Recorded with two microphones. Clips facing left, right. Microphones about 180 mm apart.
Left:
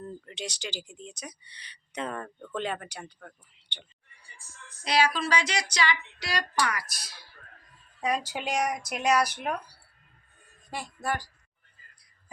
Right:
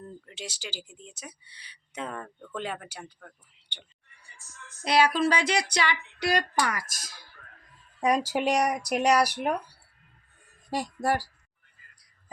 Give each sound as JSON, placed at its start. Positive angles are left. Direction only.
{"t": 0.3, "sound": "speech", "side_deg": -5}
{"t": 4.8, "sound": "a sound", "side_deg": -55}
{"t": 8.3, "sound": "speech", "side_deg": -40}
{"t": 10.7, "sound": "speech", "side_deg": -35}